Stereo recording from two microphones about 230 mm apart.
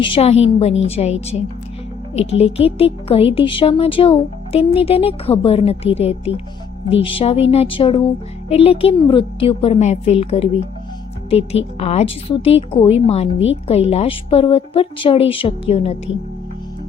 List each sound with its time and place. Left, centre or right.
0.0 s speech: left
11.8 s speech: left